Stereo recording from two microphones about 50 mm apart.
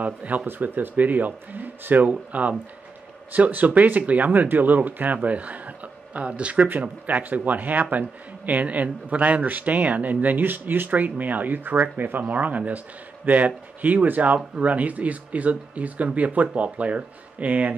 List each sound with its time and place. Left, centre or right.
0.0 s a man's voice: right